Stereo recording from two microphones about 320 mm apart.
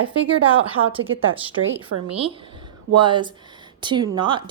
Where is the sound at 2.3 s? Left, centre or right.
Centre.